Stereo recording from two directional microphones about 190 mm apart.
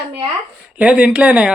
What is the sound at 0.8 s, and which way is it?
Speech, 5° right (ahead or behind).